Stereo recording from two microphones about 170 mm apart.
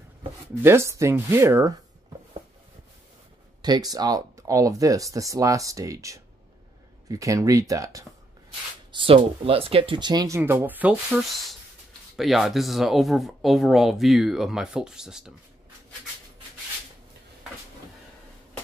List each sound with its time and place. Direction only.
0.6 s speech: 15° right (ahead or behind)
3.6 s speech: 25° right (ahead or behind)
8.9 s speech: 35° right (ahead or behind); by 15.3 s 5° right (ahead or behind)